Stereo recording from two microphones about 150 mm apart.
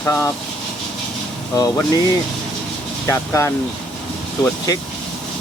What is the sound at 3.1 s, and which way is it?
Speech, 20° left (ahead or behind).